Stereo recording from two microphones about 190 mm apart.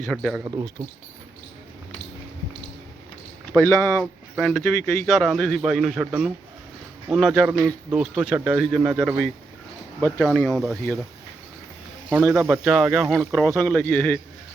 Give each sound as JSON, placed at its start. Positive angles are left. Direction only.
{"t": 0.1, "sound": "speech", "side_deg": 5}
{"t": 0.4, "sound": "speech", "side_deg": -20}
{"t": 3.5, "sound": "speech", "side_deg": 10}
{"t": 12.5, "sound": "speech", "side_deg": 0}